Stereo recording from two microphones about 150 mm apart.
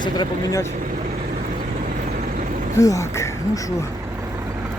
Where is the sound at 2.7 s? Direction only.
20° left (ahead or behind).